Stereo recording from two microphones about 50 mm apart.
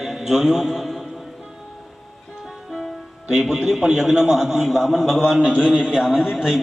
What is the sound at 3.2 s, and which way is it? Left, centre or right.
A man's voice, centre.